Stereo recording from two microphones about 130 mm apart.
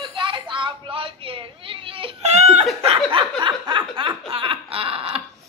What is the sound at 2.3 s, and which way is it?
Laughter, 60° right (ahead or behind).